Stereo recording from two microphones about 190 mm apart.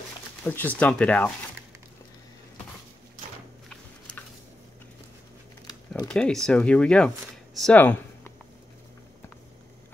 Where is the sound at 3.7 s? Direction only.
5° left (ahead or behind).